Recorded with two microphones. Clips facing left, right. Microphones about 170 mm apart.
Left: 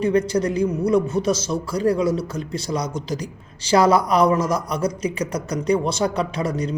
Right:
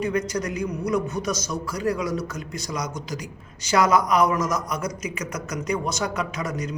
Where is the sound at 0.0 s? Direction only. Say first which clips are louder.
Left 6 dB; 30° left (ahead or behind).